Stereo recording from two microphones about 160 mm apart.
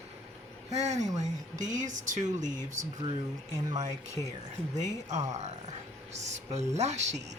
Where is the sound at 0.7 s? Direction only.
45° right (ahead or behind).